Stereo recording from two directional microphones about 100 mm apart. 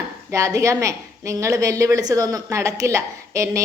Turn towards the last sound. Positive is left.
turn(degrees=-30)  # may be behind; listen again after turning